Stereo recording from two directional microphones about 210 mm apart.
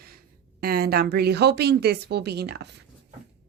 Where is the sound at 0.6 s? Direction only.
50° right (ahead or behind).